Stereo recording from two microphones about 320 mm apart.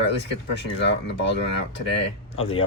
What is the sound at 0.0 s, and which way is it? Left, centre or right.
Speech, left.